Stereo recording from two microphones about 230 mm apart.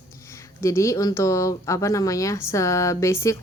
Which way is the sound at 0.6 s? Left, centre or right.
Centre.